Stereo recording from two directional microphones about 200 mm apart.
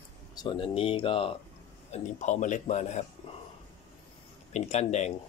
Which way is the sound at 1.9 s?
35° left (ahead or behind).